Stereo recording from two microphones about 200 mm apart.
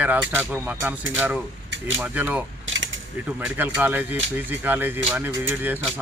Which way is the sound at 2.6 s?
75° right (ahead or behind).